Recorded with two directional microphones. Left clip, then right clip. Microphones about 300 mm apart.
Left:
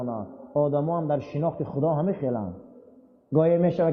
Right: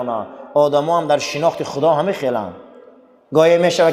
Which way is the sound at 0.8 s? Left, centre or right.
Centre.